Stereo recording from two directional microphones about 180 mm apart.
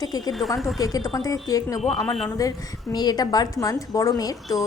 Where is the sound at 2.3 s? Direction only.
20° left (ahead or behind).